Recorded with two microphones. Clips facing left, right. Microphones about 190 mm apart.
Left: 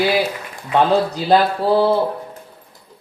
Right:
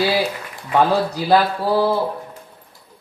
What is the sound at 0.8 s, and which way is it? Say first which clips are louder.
Speech: left 1 dB; 20° left (ahead or behind).